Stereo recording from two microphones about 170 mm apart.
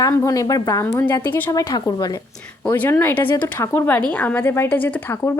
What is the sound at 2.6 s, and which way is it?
A woman's voice, 10° left (ahead or behind).